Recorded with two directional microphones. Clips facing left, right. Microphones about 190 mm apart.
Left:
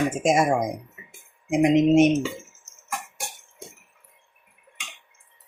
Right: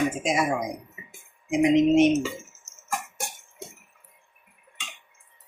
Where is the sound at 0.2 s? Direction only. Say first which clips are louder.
Left 5 dB; 50° left (ahead or behind).